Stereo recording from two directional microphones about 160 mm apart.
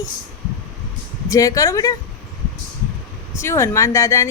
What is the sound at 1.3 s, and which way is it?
Speech, 20° left (ahead or behind).